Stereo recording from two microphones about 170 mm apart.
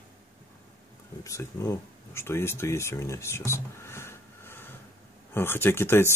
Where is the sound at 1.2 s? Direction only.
20° left (ahead or behind).